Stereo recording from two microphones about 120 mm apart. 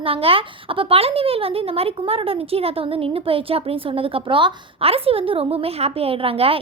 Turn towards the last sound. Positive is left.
turn(degrees=-50)  # may be behind; listen again after turning